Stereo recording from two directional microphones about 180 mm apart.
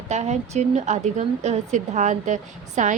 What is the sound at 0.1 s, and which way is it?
A woman's voice, 40° right (ahead or behind).